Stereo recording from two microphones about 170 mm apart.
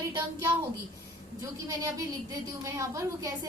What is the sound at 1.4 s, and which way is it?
A woman's voice, 20° right (ahead or behind).